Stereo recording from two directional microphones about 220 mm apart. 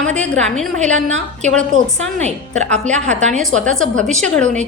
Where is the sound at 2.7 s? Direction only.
30° right (ahead or behind).